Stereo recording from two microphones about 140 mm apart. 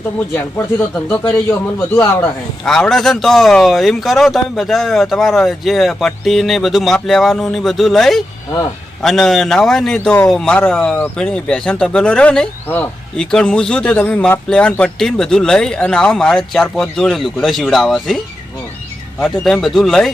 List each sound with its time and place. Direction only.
0.5 s a man's voice: 15° left (ahead or behind)
2.6 s a man's voice: 5° left (ahead or behind)
19.2 s speech: centre (ahead or behind)